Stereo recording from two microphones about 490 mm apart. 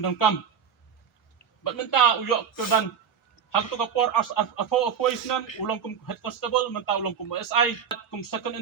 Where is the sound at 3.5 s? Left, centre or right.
Left.